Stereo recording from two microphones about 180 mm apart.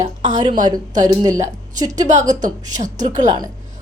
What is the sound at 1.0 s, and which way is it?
Speech, 20° right (ahead or behind).